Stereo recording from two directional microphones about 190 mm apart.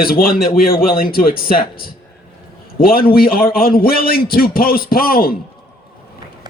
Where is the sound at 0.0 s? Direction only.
50° left (ahead or behind).